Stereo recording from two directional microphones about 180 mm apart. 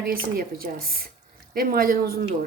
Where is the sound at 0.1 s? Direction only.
55° right (ahead or behind).